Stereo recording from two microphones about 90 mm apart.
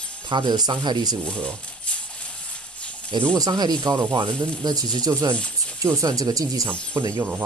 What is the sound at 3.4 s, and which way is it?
Speech, 50° right (ahead or behind).